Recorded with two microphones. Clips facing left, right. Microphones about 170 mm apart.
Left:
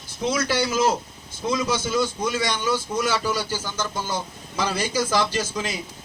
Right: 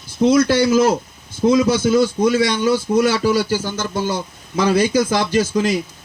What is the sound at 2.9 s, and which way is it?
Speech, 65° right (ahead or behind).